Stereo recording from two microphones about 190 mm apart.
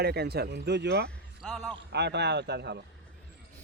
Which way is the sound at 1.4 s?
Centre (ahead or behind).